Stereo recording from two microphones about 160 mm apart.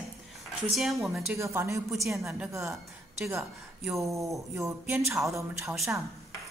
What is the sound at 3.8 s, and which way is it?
Speech, centre (ahead or behind).